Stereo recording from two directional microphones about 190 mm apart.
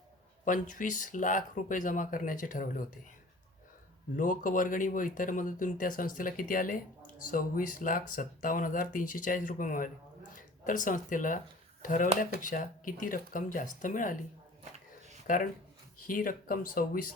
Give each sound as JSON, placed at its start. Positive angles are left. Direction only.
{"t": 0.4, "sound": "speech", "side_deg": 45}
{"t": 4.2, "sound": "speech", "side_deg": 45}
{"t": 15.3, "sound": "speech", "side_deg": 45}